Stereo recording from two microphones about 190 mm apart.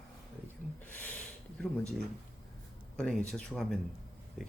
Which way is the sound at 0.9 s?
10° left (ahead or behind).